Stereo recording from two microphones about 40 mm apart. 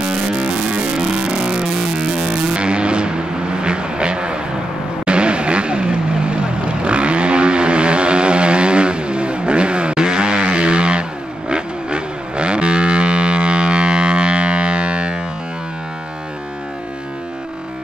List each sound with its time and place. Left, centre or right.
0.0 s music: right
5.0 s vehicle: right